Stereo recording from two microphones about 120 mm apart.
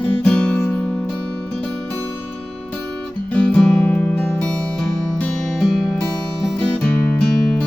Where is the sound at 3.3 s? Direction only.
5° left (ahead or behind).